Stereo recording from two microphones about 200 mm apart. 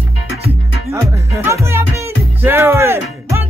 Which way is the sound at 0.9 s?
15° right (ahead or behind).